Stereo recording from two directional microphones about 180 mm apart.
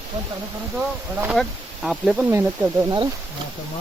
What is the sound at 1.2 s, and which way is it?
Speech, 5° right (ahead or behind).